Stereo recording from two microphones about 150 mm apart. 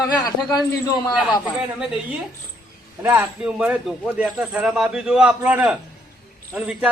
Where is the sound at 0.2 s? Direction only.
25° left (ahead or behind).